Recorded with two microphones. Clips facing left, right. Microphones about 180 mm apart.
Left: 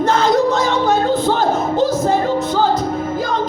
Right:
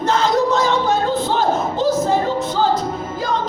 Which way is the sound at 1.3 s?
55° left (ahead or behind).